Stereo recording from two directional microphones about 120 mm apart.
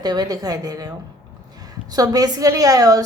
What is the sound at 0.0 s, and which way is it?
Speech, 35° right (ahead or behind).